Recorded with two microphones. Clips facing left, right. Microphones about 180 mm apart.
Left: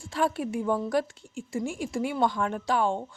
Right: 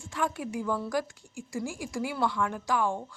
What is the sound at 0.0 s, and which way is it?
A woman's voice, 30° left (ahead or behind).